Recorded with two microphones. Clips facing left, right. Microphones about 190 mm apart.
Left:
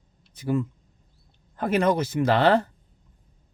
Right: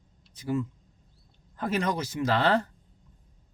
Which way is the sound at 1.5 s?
60° left (ahead or behind).